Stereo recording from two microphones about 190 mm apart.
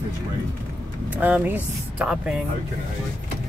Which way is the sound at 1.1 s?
10° right (ahead or behind).